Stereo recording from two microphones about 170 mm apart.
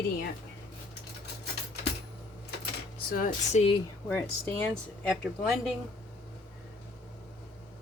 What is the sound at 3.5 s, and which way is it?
Speech, 35° left (ahead or behind).